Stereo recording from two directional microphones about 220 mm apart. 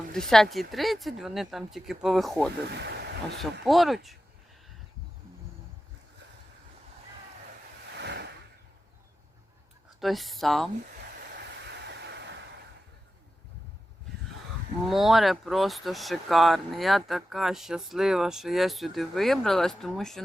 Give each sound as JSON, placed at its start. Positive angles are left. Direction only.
{"t": 0.1, "sound": "speech", "side_deg": 0}
{"t": 2.7, "sound": "a sound", "side_deg": -50}
{"t": 3.6, "sound": "speech", "side_deg": 0}
{"t": 7.9, "sound": "a sound", "side_deg": -50}
{"t": 10.0, "sound": "speech", "side_deg": 0}
{"t": 11.6, "sound": "vehicle", "side_deg": -50}
{"t": 14.8, "sound": "speech", "side_deg": 0}